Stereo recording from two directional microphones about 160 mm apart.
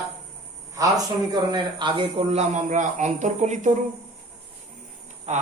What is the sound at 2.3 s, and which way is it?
Speech, 50° right (ahead or behind).